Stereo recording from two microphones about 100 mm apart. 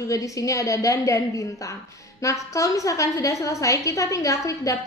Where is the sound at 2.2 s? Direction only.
30° left (ahead or behind).